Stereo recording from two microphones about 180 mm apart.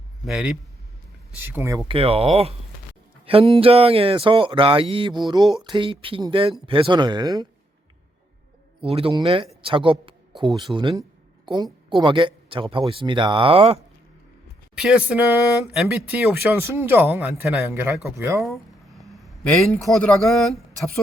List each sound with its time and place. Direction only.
0.3 s a man's voice: centre (ahead or behind)
1.4 s speech: 15° right (ahead or behind)
1.9 s speech: 30° right (ahead or behind)
8.8 s speech: 30° right (ahead or behind)
9.6 s a sound: 30° right (ahead or behind)
10.6 s speech: 25° right (ahead or behind)
14.8 s speech: 5° right (ahead or behind)
18.4 s speech: centre (ahead or behind)